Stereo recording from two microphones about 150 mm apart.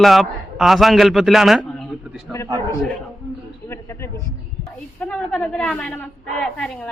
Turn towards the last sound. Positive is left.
turn(degrees=10)  # may be behind; listen again after turning